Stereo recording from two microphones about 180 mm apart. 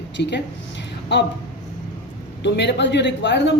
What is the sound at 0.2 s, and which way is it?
Speech, 75° left (ahead or behind).